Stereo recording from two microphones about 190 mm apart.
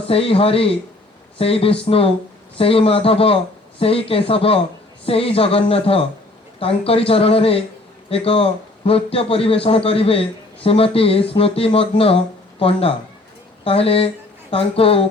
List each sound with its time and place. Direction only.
0.1 s a man's voice: 30° left (ahead or behind)